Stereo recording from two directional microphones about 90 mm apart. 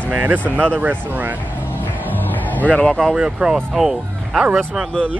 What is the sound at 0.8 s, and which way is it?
Speech, 20° right (ahead or behind).